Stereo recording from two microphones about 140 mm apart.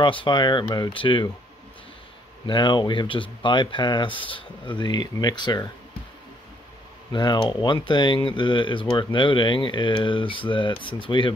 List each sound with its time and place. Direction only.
0.2 s speech: 30° left (ahead or behind)
2.4 s speech: 35° left (ahead or behind)
7.1 s speech: 35° left (ahead or behind)